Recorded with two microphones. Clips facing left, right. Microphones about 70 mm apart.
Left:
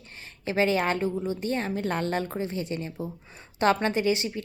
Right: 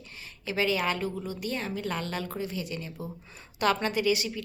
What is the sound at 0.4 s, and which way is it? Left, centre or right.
A woman's voice, left.